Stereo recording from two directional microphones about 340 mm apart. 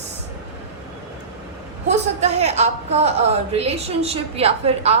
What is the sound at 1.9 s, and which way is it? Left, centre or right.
A woman's voice, centre.